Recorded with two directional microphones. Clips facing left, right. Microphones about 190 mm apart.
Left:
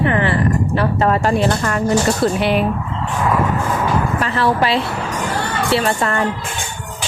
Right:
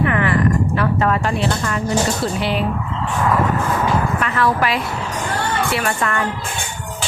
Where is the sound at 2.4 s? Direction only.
55° left (ahead or behind).